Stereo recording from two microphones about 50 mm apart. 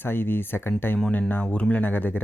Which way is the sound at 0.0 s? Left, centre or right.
Left.